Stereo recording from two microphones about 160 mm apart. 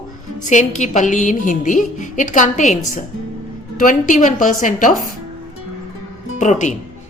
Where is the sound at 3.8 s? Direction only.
55° left (ahead or behind).